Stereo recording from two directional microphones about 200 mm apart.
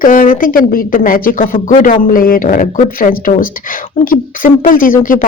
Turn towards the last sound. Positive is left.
turn(degrees=45)  # may be behind; listen again after turning